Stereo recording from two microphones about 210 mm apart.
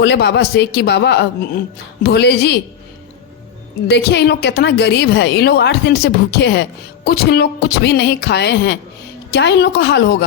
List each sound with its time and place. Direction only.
0.0 s a woman's voice: 55° left (ahead or behind)
3.8 s a woman's voice: 55° left (ahead or behind)